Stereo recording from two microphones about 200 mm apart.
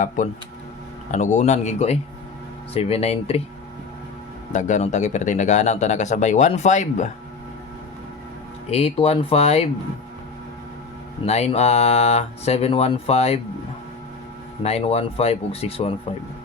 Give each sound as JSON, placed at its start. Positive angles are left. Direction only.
{"t": 0.2, "sound": "speech", "side_deg": 40}
{"t": 4.5, "sound": "speech", "side_deg": 35}
{"t": 8.7, "sound": "speech", "side_deg": 30}
{"t": 11.3, "sound": "speech", "side_deg": 30}
{"t": 14.6, "sound": "speech", "side_deg": 30}